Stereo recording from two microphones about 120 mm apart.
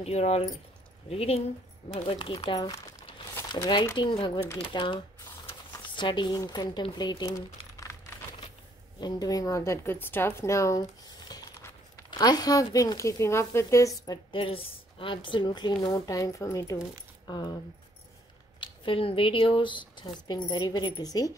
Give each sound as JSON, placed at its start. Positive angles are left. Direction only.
{"t": 0.0, "sound": "speech", "side_deg": 60}
{"t": 2.0, "sound": "speech", "side_deg": 45}
{"t": 2.5, "sound": "a woman's voice", "side_deg": 30}
{"t": 3.1, "sound": "crumpling", "side_deg": 45}
{"t": 3.5, "sound": "a woman's voice", "side_deg": 40}
{"t": 9.0, "sound": "a woman's voice", "side_deg": 30}
{"t": 14.4, "sound": "a woman's voice", "side_deg": 50}
{"t": 18.6, "sound": "speech", "side_deg": 50}